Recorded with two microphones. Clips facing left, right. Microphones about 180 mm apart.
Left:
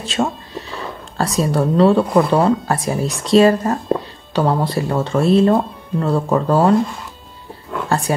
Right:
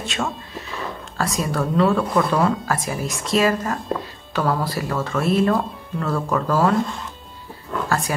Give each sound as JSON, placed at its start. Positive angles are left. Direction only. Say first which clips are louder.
{"t": 0.0, "sound": "speech", "louder": "left 6 dB", "side_deg": 35}